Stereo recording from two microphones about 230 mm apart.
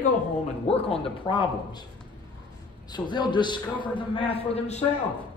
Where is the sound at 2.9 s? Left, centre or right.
Centre.